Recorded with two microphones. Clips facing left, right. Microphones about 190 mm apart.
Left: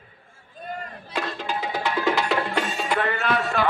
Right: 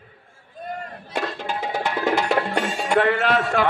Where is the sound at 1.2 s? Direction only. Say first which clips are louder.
Right 2 dB; 45° right (ahead or behind).